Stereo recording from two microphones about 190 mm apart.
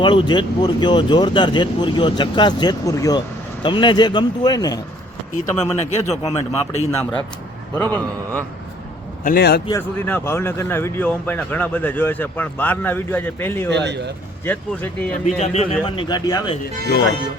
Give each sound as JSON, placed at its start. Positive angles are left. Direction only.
{"t": 0.0, "sound": "speech", "side_deg": 25}
{"t": 5.5, "sound": "speech", "side_deg": 35}
{"t": 7.0, "sound": "speech", "side_deg": 5}
{"t": 9.2, "sound": "a man's voice", "side_deg": 55}
{"t": 9.6, "sound": "speech", "side_deg": 15}
{"t": 13.7, "sound": "speech", "side_deg": -65}
{"t": 14.4, "sound": "speech", "side_deg": 10}
{"t": 15.4, "sound": "speech", "side_deg": 30}